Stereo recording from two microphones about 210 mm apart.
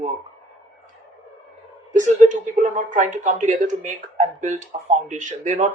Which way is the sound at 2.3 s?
40° right (ahead or behind).